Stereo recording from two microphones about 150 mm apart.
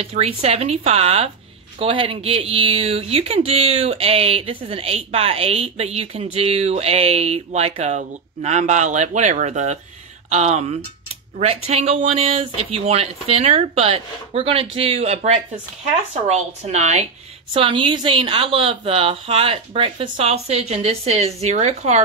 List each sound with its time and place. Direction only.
0.0 s speech: 40° right (ahead or behind)
17.5 s a woman's voice: 35° right (ahead or behind)